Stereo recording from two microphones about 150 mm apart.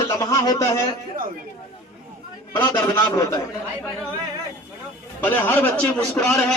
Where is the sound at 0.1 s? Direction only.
20° left (ahead or behind).